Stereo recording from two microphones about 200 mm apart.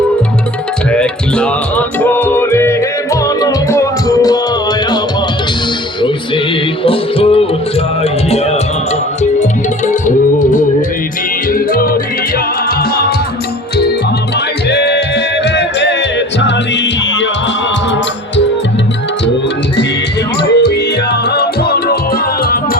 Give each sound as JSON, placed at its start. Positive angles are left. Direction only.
{"t": 0.9, "sound": "music", "side_deg": 5}
{"t": 6.8, "sound": "music", "side_deg": 25}
{"t": 14.7, "sound": "music", "side_deg": 55}
{"t": 20.4, "sound": "music", "side_deg": 55}